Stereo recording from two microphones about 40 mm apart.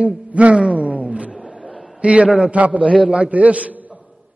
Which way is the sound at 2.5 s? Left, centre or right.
Right.